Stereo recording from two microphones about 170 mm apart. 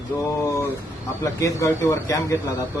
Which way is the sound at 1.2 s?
20° left (ahead or behind).